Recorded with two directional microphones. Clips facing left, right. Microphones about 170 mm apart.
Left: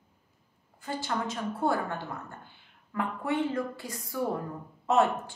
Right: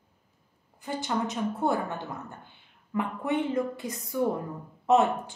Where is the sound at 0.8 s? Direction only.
20° right (ahead or behind).